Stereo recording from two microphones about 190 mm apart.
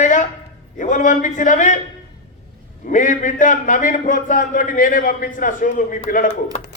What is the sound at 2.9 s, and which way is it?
A man's voice, 40° left (ahead or behind).